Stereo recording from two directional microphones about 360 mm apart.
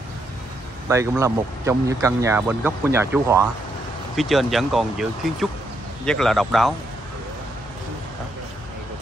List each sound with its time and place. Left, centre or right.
0.8 s speech: centre